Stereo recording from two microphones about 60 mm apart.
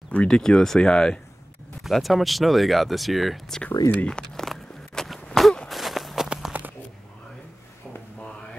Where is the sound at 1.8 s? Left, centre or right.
Centre.